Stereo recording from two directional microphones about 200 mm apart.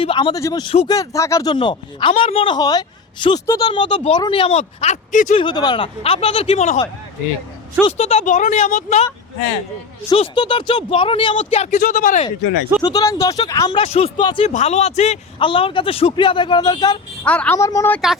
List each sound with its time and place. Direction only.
0.0 s speech: 25° left (ahead or behind)
5.4 s speech: 20° left (ahead or behind)
7.9 s speech: 30° left (ahead or behind)
10.1 s speech: 25° left (ahead or behind); by 12.2 s 45° left (ahead or behind)
12.8 s speech: 20° left (ahead or behind)
17.2 s a woman's voice: 5° left (ahead or behind)